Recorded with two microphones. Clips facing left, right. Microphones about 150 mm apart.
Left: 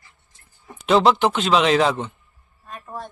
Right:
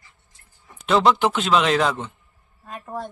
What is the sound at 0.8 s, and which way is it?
Speech, centre (ahead or behind).